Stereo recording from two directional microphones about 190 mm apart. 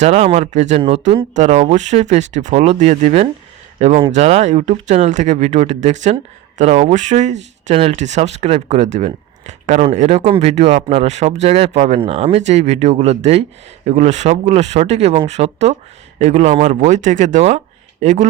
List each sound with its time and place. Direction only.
0.0 s speech: 35° right (ahead or behind)